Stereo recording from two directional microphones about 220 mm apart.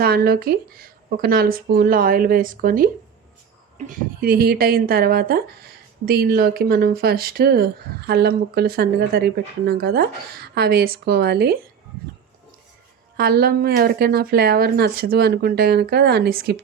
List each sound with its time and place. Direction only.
0.0 s speech: 45° right (ahead or behind)
13.1 s speech: 45° right (ahead or behind)